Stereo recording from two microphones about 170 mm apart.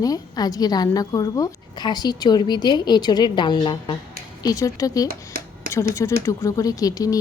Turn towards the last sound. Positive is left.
turn(degrees=20)  # may be behind; listen again after turning